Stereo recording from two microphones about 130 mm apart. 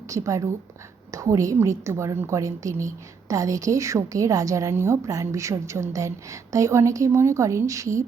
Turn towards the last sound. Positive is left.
turn(degrees=-25)  # may be behind; listen again after turning